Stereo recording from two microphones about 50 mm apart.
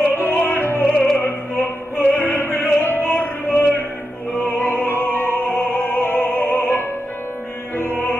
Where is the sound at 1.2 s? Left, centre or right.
Left.